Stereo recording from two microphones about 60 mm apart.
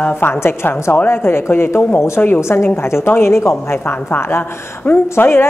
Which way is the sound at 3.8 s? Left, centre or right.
Left.